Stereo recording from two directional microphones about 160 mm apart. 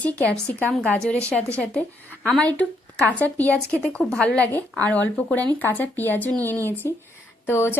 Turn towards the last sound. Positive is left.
turn(degrees=15)  # may be behind; listen again after turning